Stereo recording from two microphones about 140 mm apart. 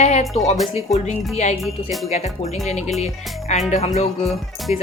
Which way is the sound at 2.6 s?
50° left (ahead or behind).